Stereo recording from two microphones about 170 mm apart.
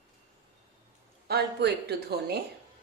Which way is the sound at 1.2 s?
70° right (ahead or behind).